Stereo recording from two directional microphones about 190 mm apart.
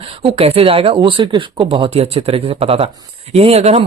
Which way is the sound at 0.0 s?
30° right (ahead or behind).